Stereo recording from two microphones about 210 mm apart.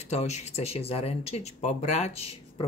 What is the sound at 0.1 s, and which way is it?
Speech, 30° left (ahead or behind).